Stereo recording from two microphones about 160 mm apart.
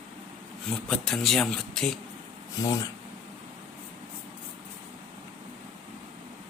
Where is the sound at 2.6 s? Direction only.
20° left (ahead or behind).